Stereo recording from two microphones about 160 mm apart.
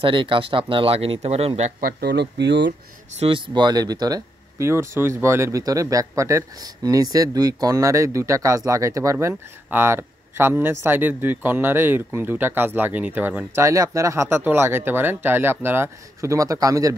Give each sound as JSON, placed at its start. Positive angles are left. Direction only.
{"t": 0.0, "sound": "speech", "side_deg": -30}
{"t": 1.8, "sound": "speech", "side_deg": -80}
{"t": 3.2, "sound": "speech", "side_deg": -35}